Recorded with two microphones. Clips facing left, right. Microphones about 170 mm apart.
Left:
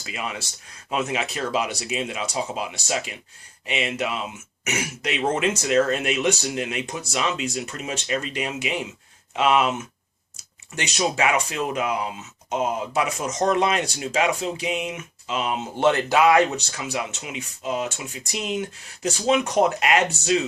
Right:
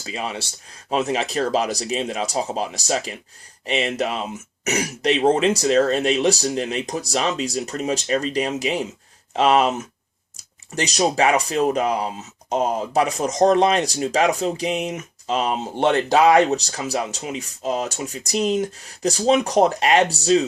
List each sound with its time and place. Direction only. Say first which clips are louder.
0.0 s speech: right 3 dB; 30° right (ahead or behind)
15.7 s speech: even; 15° right (ahead or behind)
16.0 s speech: right 5 dB; 35° right (ahead or behind)